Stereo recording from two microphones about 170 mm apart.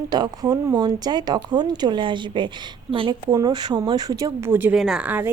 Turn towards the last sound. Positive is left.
turn(degrees=-10)  # may be behind; listen again after turning